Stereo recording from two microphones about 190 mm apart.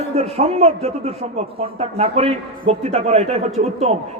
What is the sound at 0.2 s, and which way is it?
A man's voice, 35° right (ahead or behind).